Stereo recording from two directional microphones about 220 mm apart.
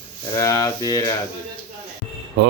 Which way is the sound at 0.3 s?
15° left (ahead or behind).